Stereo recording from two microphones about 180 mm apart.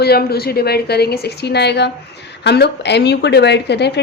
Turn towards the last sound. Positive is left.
turn(degrees=70)  # may be behind; listen again after turning